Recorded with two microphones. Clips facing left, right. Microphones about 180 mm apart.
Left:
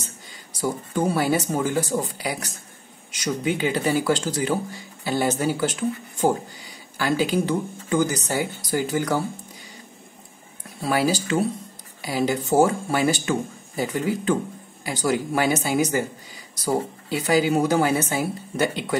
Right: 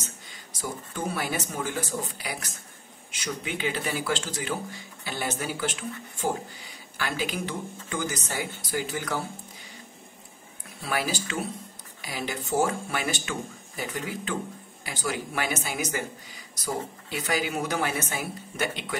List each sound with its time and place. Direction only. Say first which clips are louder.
0.0 s a sound: left 2 dB; 35° left (ahead or behind)
1.5 s a woman's voice: left 8 dB; 35° left (ahead or behind)
10.8 s a woman's voice: left 8 dB; 35° left (ahead or behind)